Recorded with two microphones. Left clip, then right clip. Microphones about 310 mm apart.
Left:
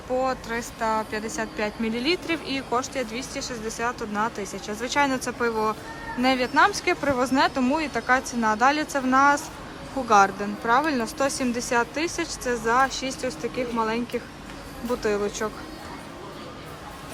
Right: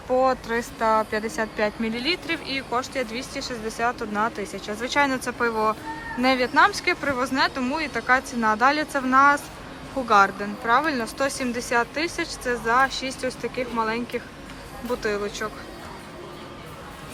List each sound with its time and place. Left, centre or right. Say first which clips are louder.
0.2 s a woman's voice: right 6 dB; centre